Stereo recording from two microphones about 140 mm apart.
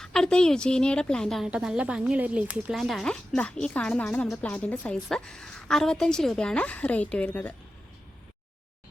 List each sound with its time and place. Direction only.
0.0 s speech: 5° left (ahead or behind)